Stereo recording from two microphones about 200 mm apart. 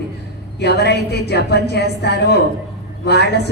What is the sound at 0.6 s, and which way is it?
A woman's voice, 55° left (ahead or behind).